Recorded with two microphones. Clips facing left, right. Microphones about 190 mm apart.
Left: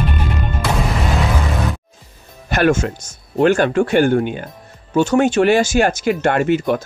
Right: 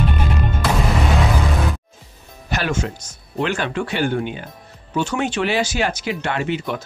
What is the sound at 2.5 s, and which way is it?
Speech, 50° left (ahead or behind).